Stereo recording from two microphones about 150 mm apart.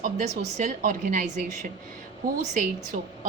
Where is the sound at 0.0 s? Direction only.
60° right (ahead or behind).